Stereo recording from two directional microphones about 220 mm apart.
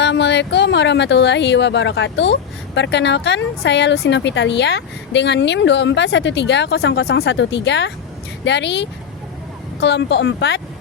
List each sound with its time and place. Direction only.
0.0 s speech: 55° left (ahead or behind)